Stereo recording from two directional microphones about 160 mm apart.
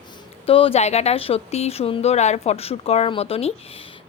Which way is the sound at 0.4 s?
35° left (ahead or behind).